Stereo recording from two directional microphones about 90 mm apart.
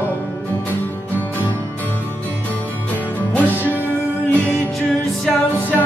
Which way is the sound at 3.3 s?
20° left (ahead or behind).